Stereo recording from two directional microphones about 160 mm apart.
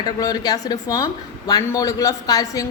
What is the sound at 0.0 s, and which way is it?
A woman's voice, 25° left (ahead or behind).